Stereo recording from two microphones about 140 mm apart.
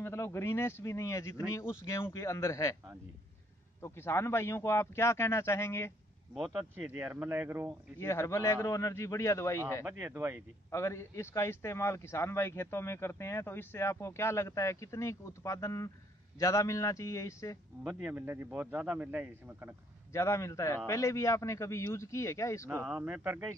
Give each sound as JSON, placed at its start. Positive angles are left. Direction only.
{"t": 0.0, "sound": "a man's voice", "side_deg": 20}
{"t": 3.8, "sound": "a man's voice", "side_deg": 20}
{"t": 6.3, "sound": "speech", "side_deg": -5}
{"t": 8.0, "sound": "a man's voice", "side_deg": 20}
{"t": 9.8, "sound": "speech", "side_deg": -15}
{"t": 10.7, "sound": "a man's voice", "side_deg": 20}
{"t": 17.8, "sound": "speech", "side_deg": -10}
{"t": 20.1, "sound": "a man's voice", "side_deg": 20}
{"t": 22.8, "sound": "speech", "side_deg": -10}